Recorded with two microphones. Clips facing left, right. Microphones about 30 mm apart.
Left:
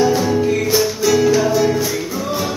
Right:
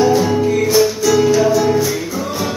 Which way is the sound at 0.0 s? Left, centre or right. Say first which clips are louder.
Right 2 dB; centre.